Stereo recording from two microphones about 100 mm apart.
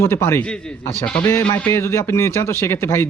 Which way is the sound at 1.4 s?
20° left (ahead or behind).